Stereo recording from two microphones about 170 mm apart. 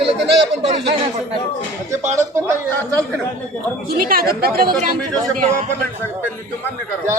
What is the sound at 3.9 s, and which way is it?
Speech, 60° right (ahead or behind).